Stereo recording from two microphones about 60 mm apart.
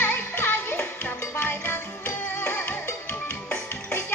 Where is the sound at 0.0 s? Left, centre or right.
Left.